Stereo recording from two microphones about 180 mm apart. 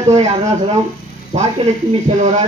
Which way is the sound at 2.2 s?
40° right (ahead or behind).